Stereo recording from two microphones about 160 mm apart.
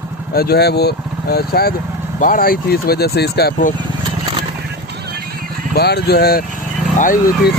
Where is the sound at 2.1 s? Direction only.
60° left (ahead or behind); by 3.7 s 85° left.